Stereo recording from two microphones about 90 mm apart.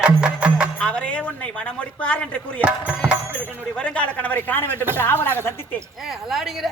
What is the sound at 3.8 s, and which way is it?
A man's voice, 15° left (ahead or behind).